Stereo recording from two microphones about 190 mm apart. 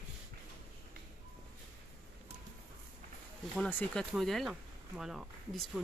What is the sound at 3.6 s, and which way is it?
Speech, 5° left (ahead or behind).